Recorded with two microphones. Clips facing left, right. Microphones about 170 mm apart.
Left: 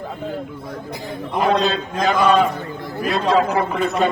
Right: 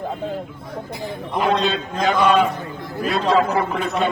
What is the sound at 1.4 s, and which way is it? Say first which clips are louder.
A man's voice: left 2 dB; 40° left (ahead or behind).